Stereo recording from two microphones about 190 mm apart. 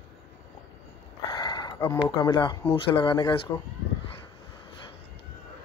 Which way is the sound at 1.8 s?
15° left (ahead or behind).